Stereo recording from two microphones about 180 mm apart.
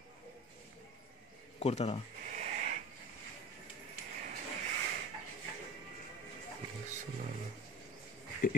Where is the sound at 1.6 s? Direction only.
35° left (ahead or behind).